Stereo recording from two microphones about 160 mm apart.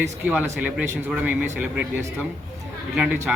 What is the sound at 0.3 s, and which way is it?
A man's voice, 5° right (ahead or behind).